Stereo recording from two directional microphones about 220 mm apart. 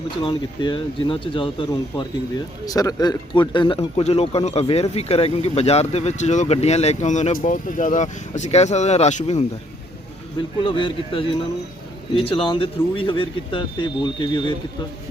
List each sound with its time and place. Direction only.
0.2 s speech: 20° left (ahead or behind)
10.6 s speech: 20° left (ahead or behind)